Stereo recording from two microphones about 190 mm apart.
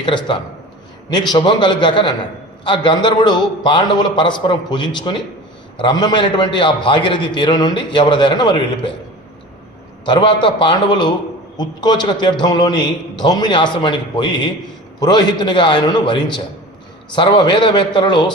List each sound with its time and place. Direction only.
0.0 s a man's voice: 25° left (ahead or behind)
10.1 s a man's voice: 25° left (ahead or behind)